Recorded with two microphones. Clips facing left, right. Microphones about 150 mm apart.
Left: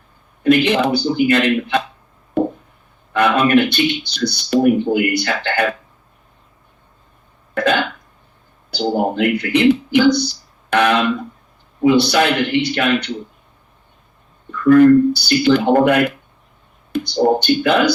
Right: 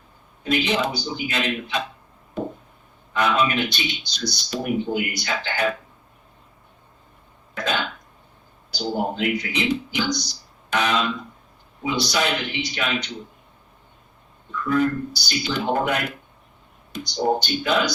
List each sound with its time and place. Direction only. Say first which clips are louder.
0.4 s speech: left 9 dB; 60° left (ahead or behind)
2.4 s a sound: left 10 dB; 60° left (ahead or behind)
3.1 s speech: left 7 dB; 60° left (ahead or behind)
7.5 s cough: left 9 dB; 60° left (ahead or behind)
8.7 s speech: left 7 dB; 60° left (ahead or behind)
14.5 s speech: left 13 dB; 60° left (ahead or behind)